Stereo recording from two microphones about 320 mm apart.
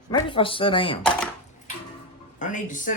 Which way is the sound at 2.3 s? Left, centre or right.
Left.